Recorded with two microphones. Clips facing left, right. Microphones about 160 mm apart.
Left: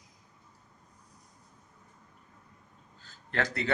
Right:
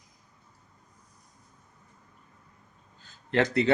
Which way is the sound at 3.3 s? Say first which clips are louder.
Right 8 dB; 20° right (ahead or behind).